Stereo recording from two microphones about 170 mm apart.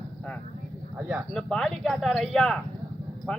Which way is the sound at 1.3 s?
Centre (ahead or behind).